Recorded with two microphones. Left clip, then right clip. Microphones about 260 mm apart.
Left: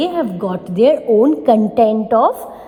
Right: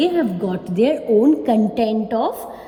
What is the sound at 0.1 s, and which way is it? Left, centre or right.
A woman's voice, left.